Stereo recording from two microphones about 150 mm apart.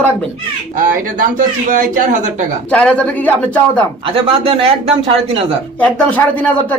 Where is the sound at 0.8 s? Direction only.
65° right (ahead or behind).